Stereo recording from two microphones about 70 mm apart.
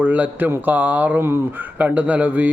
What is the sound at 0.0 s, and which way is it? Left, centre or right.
Speech, right.